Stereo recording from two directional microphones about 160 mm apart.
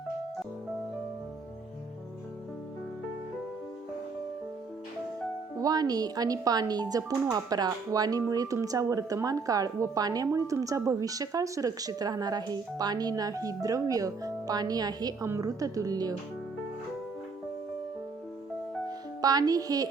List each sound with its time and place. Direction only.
5.5 s speech: 25° right (ahead or behind)
19.2 s speech: 25° right (ahead or behind)